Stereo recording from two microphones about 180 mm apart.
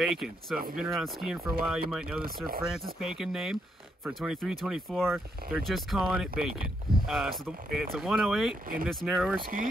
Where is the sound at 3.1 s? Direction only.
Centre (ahead or behind).